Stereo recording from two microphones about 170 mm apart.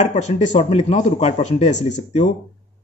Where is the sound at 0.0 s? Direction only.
45° left (ahead or behind).